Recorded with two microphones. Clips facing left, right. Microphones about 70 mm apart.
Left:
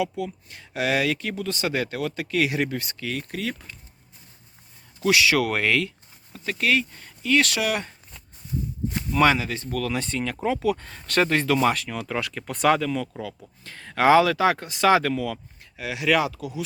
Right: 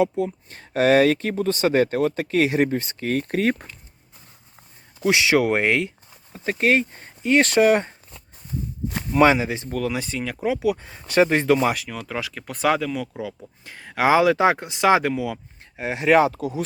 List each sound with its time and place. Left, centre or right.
0.0 s speech: right
3.1 s speech: right
5.0 s speech: right
9.1 s speech: right
9.9 s speech: centre
15.7 s speech: right